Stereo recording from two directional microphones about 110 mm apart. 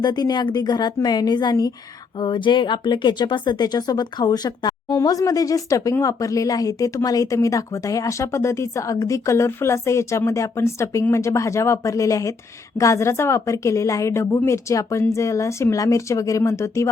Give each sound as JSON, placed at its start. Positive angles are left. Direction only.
{"t": 0.0, "sound": "a woman's voice", "side_deg": 40}